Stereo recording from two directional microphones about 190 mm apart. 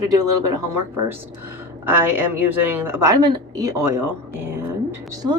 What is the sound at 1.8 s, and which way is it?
A woman's voice, 10° right (ahead or behind).